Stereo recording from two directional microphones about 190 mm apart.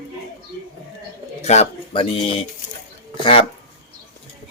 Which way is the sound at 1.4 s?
35° left (ahead or behind).